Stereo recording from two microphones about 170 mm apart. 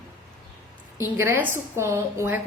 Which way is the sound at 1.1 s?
15° right (ahead or behind).